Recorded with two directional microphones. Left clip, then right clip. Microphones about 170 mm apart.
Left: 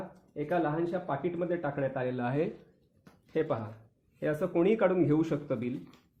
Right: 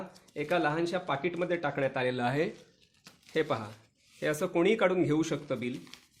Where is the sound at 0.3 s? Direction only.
30° right (ahead or behind).